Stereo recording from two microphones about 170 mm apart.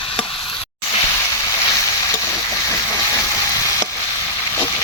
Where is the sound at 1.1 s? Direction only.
15° left (ahead or behind).